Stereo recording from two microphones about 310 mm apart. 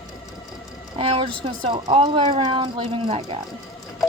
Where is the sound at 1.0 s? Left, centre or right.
Centre.